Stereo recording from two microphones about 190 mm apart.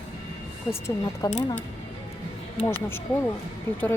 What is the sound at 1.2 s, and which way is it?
Speech, 20° left (ahead or behind).